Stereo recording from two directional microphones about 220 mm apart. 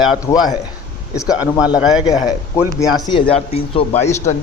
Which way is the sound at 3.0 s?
25° left (ahead or behind).